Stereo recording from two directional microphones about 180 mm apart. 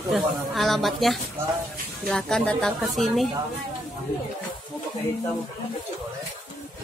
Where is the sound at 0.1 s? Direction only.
Centre (ahead or behind).